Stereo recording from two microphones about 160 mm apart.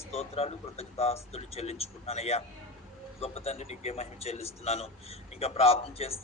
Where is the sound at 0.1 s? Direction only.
40° left (ahead or behind).